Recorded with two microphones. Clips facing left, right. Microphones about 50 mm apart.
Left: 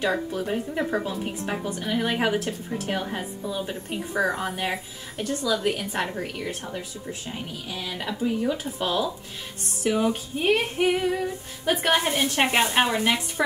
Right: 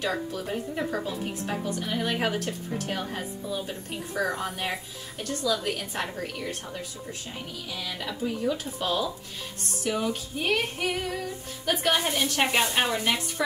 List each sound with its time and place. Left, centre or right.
0.0 s female singing: centre
4.3 s a woman's voice: centre
6.1 s female singing: centre
8.1 s a woman's voice: centre
9.8 s female singing: left